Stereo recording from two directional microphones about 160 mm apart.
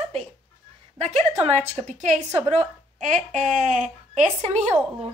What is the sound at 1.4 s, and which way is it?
Speech, 45° right (ahead or behind).